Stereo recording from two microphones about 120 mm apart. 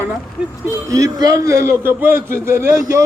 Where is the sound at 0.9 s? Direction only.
30° right (ahead or behind).